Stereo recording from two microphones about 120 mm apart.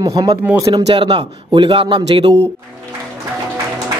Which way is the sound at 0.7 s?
45° right (ahead or behind).